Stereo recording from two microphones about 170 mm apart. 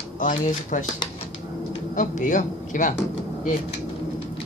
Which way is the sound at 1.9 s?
50° left (ahead or behind).